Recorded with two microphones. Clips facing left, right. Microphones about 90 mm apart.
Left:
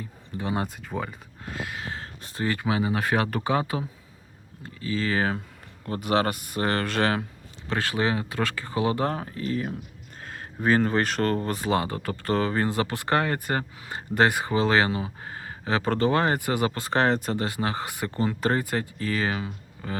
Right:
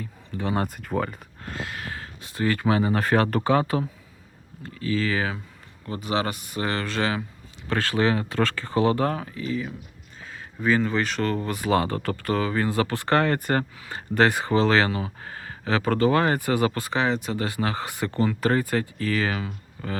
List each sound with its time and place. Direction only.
0.3 s speech: 15° left (ahead or behind)
0.8 s speech: centre (ahead or behind)
1.8 s a sound: 25° left (ahead or behind)
2.2 s speech: 30° left (ahead or behind)
2.5 s speech: 10° left (ahead or behind)
4.6 s speech: 25° left (ahead or behind)
5.8 s speech: 50° left (ahead or behind)
7.7 s speech: 20° left (ahead or behind)
9.4 s speech: 45° left (ahead or behind); by 11.9 s 20° left (ahead or behind)
12.2 s speech: 35° left (ahead or behind)
12.7 s speech: 20° left (ahead or behind)
16.9 s speech: 45° left (ahead or behind)
17.3 s speech: 25° left (ahead or behind)